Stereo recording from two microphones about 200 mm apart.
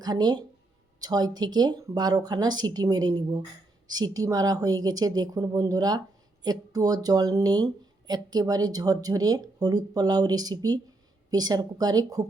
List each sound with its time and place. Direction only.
0.0 s speech: 20° right (ahead or behind)